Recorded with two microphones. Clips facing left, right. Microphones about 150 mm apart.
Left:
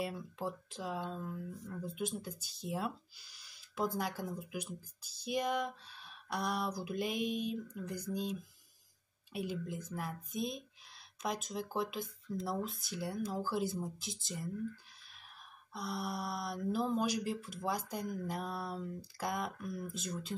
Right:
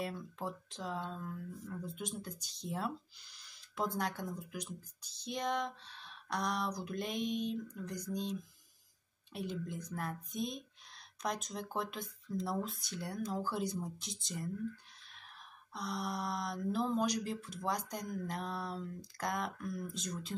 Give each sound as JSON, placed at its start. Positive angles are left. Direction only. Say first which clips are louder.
{"t": 0.0, "sound": "speech", "louder": "left 1 dB", "side_deg": 5}
{"t": 15.7, "sound": "speech", "louder": "even", "side_deg": 5}